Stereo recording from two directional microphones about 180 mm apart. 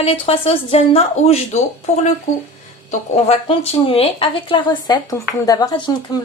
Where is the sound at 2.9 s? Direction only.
35° left (ahead or behind).